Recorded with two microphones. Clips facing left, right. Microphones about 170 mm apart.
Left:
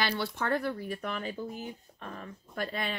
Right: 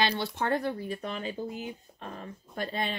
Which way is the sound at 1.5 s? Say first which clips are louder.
Right 2 dB; 10° right (ahead or behind).